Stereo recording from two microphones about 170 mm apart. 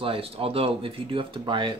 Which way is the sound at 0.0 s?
35° right (ahead or behind).